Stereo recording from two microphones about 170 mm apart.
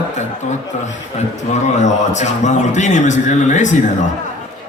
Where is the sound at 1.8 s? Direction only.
45° left (ahead or behind).